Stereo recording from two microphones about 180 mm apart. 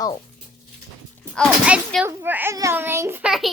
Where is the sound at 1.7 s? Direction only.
10° right (ahead or behind).